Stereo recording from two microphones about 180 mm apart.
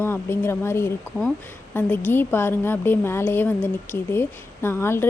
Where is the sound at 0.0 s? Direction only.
15° left (ahead or behind).